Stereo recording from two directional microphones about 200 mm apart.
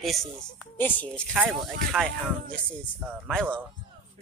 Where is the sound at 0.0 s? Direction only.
Centre (ahead or behind).